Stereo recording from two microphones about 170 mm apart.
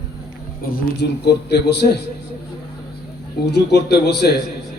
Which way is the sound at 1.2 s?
75° left (ahead or behind).